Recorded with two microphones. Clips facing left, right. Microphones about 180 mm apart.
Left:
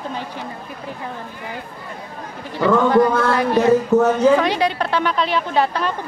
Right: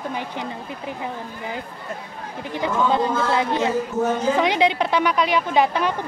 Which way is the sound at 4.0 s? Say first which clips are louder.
Left 6 dB; 70° left (ahead or behind).